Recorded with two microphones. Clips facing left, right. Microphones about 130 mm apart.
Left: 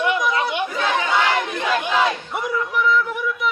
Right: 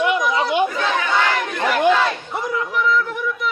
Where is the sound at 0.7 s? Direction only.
20° left (ahead or behind).